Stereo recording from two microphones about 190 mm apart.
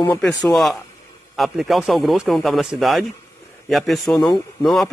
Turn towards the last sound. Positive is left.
turn(degrees=0)  # may be behind; listen again after turning